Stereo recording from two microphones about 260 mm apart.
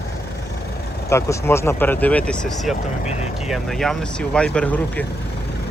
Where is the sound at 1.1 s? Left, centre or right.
Centre.